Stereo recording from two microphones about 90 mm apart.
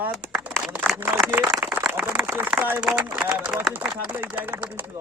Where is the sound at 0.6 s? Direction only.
20° right (ahead or behind).